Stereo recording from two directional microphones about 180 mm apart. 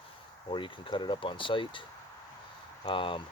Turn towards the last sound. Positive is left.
turn(degrees=30)  # may be behind; listen again after turning